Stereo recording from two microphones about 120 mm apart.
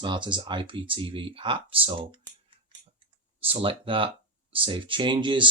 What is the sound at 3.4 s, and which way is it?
Speech, 50° right (ahead or behind).